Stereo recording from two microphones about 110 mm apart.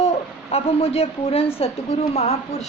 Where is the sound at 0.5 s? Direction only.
65° left (ahead or behind).